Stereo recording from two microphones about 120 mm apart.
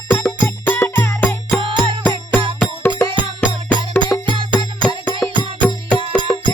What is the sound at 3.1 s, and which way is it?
Music, 45° right (ahead or behind).